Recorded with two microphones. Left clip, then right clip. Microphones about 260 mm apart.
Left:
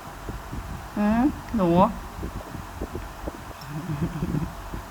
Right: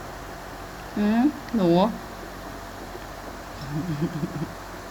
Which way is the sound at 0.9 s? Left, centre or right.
Centre.